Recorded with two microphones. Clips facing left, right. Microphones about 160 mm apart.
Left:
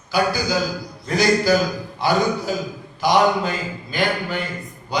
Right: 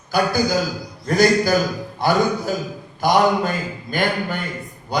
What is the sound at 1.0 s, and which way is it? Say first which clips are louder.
A man's voice: right 2 dB; 50° right (ahead or behind).